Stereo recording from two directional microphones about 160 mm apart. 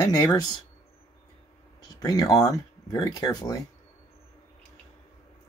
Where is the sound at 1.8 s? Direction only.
25° left (ahead or behind).